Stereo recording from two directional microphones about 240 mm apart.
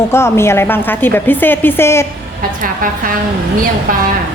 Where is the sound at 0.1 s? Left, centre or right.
Centre.